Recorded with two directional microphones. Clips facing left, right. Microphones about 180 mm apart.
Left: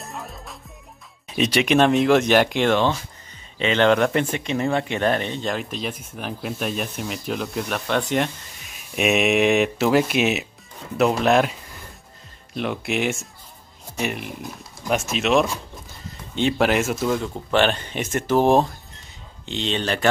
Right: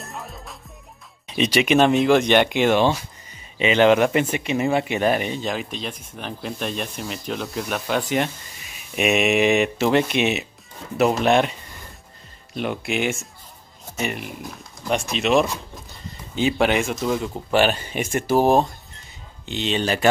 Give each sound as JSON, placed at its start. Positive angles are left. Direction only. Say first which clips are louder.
{"t": 0.0, "sound": "music", "louder": "even", "side_deg": 0}
{"t": 1.2, "sound": "speech", "louder": "right 1 dB", "side_deg": 0}
{"t": 2.7, "sound": "speech", "louder": "right 2 dB", "side_deg": -15}
{"t": 12.5, "sound": "speech", "louder": "even", "side_deg": 0}